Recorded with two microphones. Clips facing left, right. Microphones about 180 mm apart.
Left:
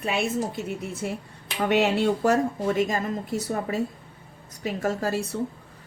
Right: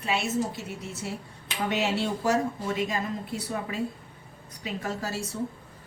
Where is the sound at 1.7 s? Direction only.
60° left (ahead or behind).